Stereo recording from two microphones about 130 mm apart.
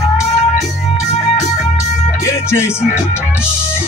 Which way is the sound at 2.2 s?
20° left (ahead or behind).